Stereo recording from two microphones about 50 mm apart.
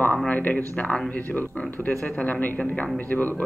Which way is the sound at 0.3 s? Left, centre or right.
Left.